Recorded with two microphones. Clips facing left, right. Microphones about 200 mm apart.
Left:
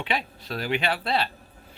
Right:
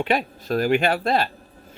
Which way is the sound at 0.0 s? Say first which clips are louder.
Right 7 dB; 45° right (ahead or behind).